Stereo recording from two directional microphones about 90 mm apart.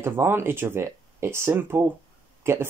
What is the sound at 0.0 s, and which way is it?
Speech, 25° right (ahead or behind).